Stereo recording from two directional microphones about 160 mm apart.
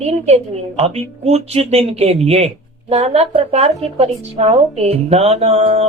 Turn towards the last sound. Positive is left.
turn(degrees=-40)  # may be behind; listen again after turning